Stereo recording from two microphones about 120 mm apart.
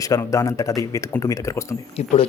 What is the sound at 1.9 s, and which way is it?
Speech, 60° left (ahead or behind).